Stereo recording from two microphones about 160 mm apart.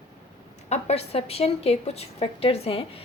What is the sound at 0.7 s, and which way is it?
A woman's voice, 40° left (ahead or behind).